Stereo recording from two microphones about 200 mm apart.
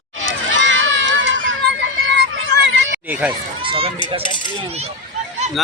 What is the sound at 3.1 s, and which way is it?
Speech, 10° right (ahead or behind).